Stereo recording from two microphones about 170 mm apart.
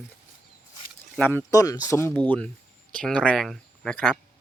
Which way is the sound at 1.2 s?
10° left (ahead or behind).